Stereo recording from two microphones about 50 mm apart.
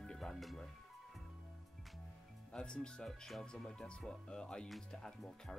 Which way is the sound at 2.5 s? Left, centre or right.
Centre.